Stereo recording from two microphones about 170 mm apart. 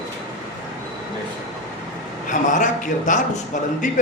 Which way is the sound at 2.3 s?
50° left (ahead or behind).